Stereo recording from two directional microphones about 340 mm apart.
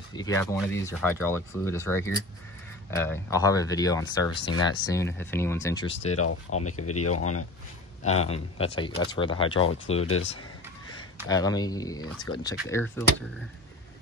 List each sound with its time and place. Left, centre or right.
0.1 s speech: centre
6.1 s speech: left
8.3 s speech: centre
9.9 s speech: left
11.2 s speech: centre